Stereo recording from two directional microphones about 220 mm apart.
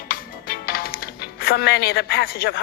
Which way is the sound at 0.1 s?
45° left (ahead or behind).